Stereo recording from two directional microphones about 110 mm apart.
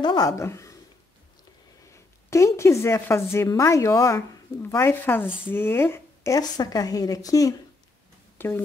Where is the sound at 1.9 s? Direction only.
25° left (ahead or behind).